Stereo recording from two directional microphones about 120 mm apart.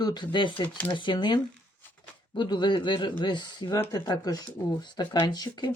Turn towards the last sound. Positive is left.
turn(degrees=35)  # may be behind; listen again after turning